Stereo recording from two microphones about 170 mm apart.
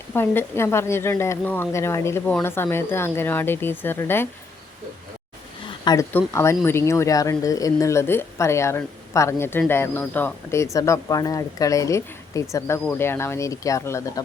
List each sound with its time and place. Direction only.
0.1 s speech: 15° left (ahead or behind)
5.8 s speech: 20° left (ahead or behind)